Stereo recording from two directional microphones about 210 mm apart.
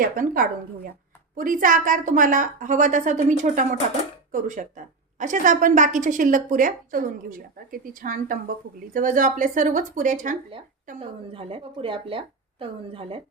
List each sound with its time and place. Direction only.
0.0 s a woman's voice: 40° right (ahead or behind)
11.0 s a woman's voice: 25° right (ahead or behind)